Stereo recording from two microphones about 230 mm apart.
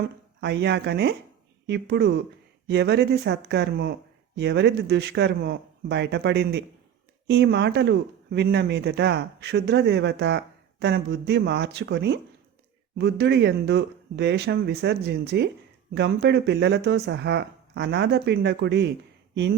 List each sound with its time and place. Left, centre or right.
0.4 s speech: right